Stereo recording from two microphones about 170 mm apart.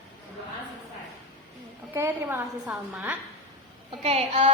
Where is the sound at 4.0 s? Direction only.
35° right (ahead or behind).